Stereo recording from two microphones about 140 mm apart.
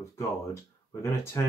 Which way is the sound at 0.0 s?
20° left (ahead or behind).